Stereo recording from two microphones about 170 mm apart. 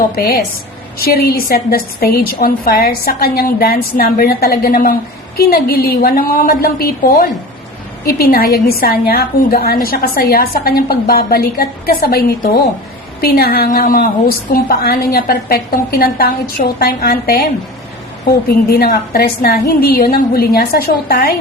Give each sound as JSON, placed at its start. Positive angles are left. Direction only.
{"t": 0.2, "sound": "a woman's voice", "side_deg": 65}
{"t": 13.2, "sound": "a woman's voice", "side_deg": 65}